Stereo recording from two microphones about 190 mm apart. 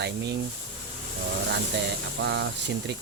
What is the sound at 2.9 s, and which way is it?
Speech, 65° right (ahead or behind).